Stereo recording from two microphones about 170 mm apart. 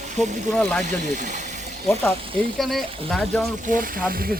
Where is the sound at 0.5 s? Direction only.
5° left (ahead or behind).